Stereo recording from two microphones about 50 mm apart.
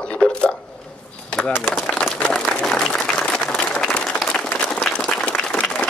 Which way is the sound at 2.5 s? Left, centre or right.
Left.